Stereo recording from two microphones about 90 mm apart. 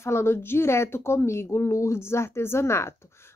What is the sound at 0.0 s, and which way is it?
Speech, 30° left (ahead or behind).